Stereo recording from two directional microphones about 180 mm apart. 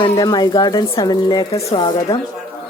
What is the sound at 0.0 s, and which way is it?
Speech, 20° left (ahead or behind).